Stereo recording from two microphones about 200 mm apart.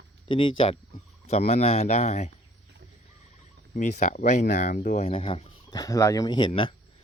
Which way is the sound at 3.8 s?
35° left (ahead or behind).